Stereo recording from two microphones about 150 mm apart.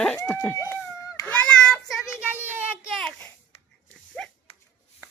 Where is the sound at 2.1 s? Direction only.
10° right (ahead or behind).